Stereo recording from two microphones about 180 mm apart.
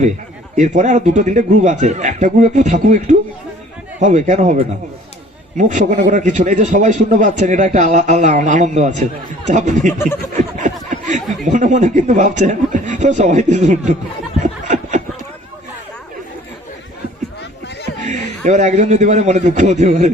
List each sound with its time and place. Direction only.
0.5 s speech: 45° right (ahead or behind)
14.3 s snicker: 40° right (ahead or behind)
18.0 s a man's voice: 40° right (ahead or behind)